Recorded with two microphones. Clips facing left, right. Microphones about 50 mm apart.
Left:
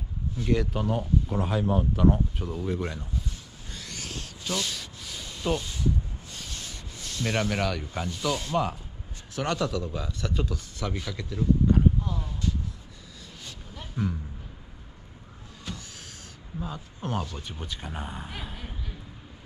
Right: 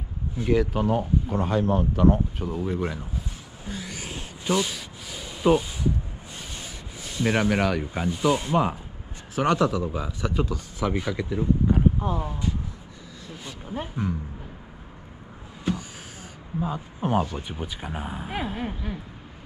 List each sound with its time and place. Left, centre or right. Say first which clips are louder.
0.5 s speech: right 4 dB; centre
3.6 s a sound: right 5 dB; centre
6.3 s speech: right 2 dB; centre
12.0 s speech: right 5 dB; right
13.3 s a sound: right 9 dB; centre
14.0 s speech: even; centre
16.5 s speech: right 7 dB; centre
18.6 s speech: right 11 dB; right